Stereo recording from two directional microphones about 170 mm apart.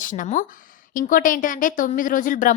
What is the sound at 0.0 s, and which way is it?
A woman's voice, 50° left (ahead or behind).